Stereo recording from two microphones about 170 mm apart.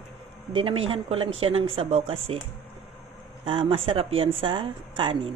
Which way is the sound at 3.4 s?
30° right (ahead or behind).